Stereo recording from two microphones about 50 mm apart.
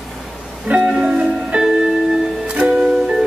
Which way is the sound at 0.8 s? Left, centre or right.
Centre.